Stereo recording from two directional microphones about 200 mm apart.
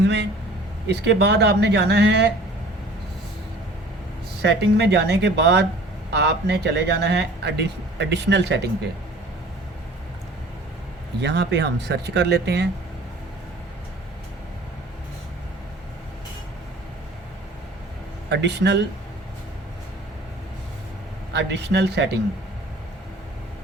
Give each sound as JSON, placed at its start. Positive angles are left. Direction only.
{"t": 0.0, "sound": "speech", "side_deg": -60}
{"t": 4.4, "sound": "speech", "side_deg": -55}
{"t": 11.2, "sound": "speech", "side_deg": -60}
{"t": 18.3, "sound": "speech", "side_deg": -60}
{"t": 21.3, "sound": "speech", "side_deg": -60}